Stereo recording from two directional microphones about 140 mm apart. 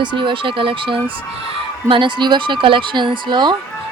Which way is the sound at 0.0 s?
35° right (ahead or behind).